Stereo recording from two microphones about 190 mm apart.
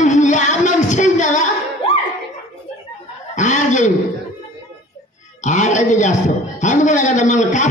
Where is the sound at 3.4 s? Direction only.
40° left (ahead or behind).